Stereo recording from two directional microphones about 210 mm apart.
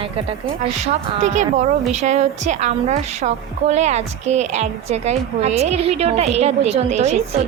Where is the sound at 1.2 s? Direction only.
35° right (ahead or behind).